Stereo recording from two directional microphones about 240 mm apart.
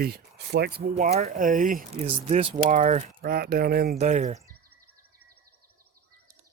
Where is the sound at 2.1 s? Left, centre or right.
Right.